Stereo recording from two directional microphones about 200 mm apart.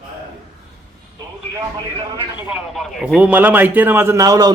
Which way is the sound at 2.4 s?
5° right (ahead or behind).